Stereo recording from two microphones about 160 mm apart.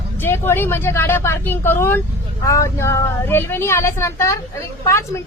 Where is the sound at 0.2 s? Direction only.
15° left (ahead or behind).